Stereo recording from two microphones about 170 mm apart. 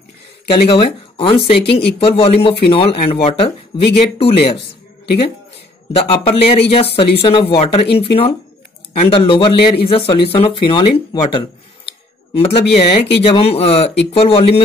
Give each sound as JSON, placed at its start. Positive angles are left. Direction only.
{"t": 0.5, "sound": "speech", "side_deg": 30}
{"t": 5.9, "sound": "speech", "side_deg": 35}